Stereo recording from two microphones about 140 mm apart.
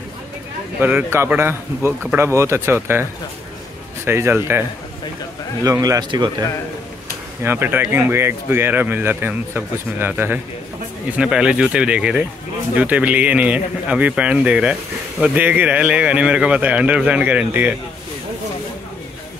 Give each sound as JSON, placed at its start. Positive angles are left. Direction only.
{"t": 0.7, "sound": "a man's voice", "side_deg": -10}
{"t": 7.4, "sound": "speech", "side_deg": -15}